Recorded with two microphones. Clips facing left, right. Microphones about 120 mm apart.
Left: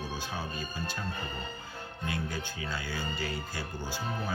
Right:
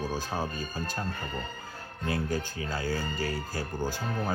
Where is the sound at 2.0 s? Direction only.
40° right (ahead or behind).